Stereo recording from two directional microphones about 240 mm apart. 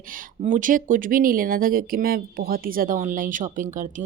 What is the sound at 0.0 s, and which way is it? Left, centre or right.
Speech, right.